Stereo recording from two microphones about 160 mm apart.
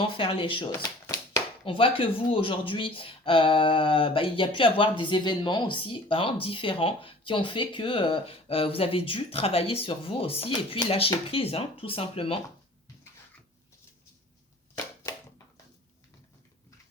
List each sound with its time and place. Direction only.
0.0 s speech: 35° left (ahead or behind)
0.7 s a sound: 15° left (ahead or behind)
1.6 s speech: 35° left (ahead or behind)